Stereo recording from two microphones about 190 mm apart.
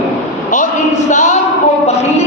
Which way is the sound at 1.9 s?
35° left (ahead or behind).